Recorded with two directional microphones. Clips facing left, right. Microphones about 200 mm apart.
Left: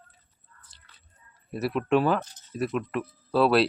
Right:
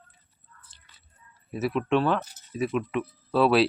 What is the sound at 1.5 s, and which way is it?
Speech, centre (ahead or behind).